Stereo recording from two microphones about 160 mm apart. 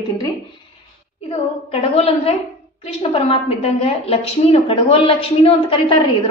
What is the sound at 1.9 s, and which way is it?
A woman's voice, 40° left (ahead or behind).